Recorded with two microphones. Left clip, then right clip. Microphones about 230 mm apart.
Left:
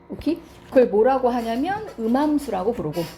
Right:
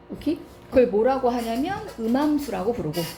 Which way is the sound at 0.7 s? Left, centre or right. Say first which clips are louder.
Left 2 dB; left.